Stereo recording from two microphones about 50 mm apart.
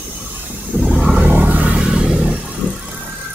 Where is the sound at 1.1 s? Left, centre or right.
Right.